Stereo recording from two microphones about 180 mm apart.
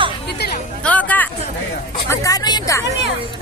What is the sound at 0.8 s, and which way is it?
Music, 10° left (ahead or behind).